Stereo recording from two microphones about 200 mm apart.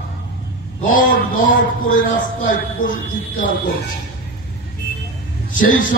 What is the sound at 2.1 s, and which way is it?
Speech, 40° left (ahead or behind).